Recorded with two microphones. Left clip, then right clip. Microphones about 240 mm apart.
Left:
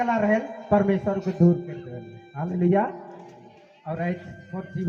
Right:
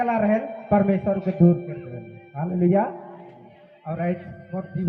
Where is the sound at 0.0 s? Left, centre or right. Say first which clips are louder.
Right 1 dB; right.